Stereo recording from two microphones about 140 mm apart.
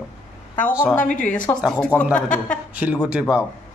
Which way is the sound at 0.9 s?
70° left (ahead or behind).